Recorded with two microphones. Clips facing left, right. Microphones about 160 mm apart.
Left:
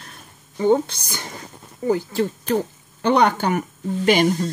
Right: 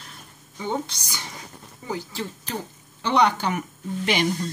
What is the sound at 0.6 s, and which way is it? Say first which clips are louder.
Speech: left 11 dB; 50° left (ahead or behind).